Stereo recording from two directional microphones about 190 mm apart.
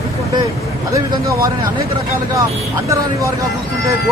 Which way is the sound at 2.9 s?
15° right (ahead or behind).